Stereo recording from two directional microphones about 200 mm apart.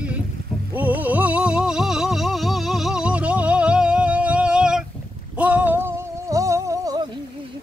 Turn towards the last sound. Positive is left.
turn(degrees=-15)  # may be behind; listen again after turning